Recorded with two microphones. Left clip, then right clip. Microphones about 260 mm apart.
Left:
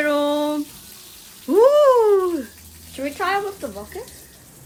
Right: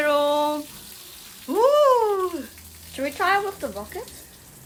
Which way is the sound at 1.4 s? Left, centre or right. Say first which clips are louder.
Left 4 dB; centre.